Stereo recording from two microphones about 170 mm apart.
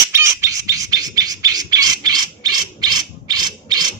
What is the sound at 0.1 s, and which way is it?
Bird, 15° right (ahead or behind).